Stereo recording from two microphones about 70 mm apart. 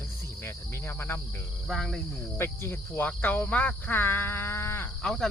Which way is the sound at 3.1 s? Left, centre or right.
Left.